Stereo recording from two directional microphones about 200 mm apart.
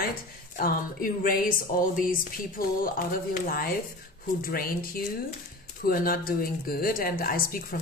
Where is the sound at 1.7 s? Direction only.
40° left (ahead or behind).